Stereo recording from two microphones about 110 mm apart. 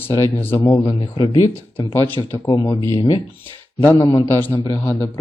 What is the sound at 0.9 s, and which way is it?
Speech, 40° left (ahead or behind).